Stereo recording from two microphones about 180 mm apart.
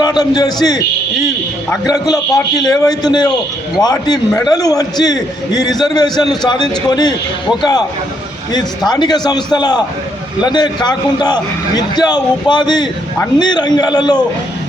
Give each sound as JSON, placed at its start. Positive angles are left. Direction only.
{"t": 0.0, "sound": "a man's voice", "side_deg": 20}
{"t": 1.9, "sound": "a man's voice", "side_deg": 20}
{"t": 8.9, "sound": "a man's voice", "side_deg": 25}